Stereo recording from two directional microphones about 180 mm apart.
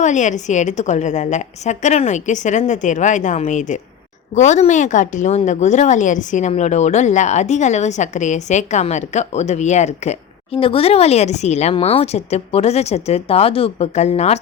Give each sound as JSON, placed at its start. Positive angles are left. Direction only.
{"t": 0.0, "sound": "a woman's voice", "side_deg": 40}